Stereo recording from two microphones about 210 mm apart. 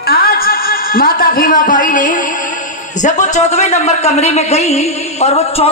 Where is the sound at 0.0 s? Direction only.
45° left (ahead or behind).